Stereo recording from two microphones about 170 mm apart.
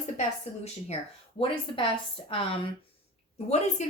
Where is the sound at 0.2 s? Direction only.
40° left (ahead or behind).